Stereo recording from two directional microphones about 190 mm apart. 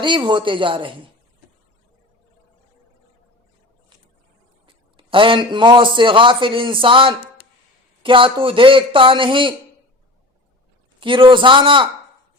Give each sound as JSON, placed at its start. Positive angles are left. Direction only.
{"t": 0.0, "sound": "a man's voice", "side_deg": -25}
{"t": 4.6, "sound": "a man's voice", "side_deg": -25}
{"t": 11.0, "sound": "a man's voice", "side_deg": -25}